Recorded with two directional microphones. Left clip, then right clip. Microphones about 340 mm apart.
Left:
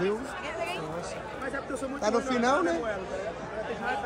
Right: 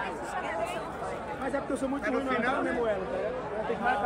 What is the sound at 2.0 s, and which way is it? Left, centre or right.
Speech, centre.